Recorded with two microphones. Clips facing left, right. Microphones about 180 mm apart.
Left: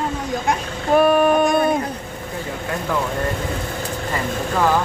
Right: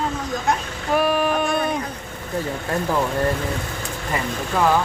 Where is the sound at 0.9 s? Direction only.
50° left (ahead or behind).